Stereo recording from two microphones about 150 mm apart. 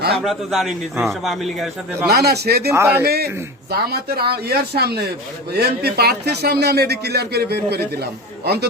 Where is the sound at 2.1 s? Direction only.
90° right.